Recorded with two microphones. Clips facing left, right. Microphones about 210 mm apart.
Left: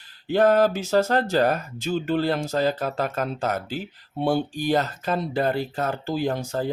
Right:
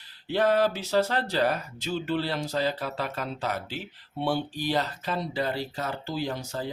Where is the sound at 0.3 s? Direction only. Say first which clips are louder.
Left 5 dB; 45° left (ahead or behind).